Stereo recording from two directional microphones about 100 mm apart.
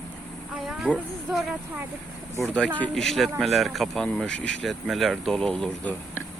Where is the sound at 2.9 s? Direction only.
5° left (ahead or behind).